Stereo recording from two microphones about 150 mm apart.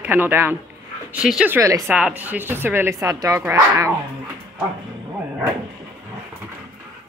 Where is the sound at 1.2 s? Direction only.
5° right (ahead or behind).